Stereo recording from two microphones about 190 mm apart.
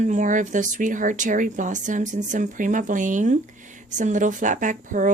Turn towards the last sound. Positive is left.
turn(degrees=-45)  # may be behind; listen again after turning